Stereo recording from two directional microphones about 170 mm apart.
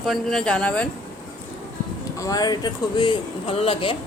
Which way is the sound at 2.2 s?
20° left (ahead or behind).